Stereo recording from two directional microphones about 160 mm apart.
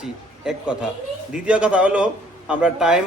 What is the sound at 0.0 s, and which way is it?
A man's voice, 5° right (ahead or behind).